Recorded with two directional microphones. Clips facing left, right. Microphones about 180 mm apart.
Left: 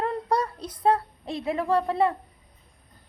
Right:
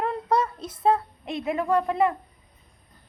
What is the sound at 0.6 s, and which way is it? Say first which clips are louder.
Child singing: even; 25° right (ahead or behind).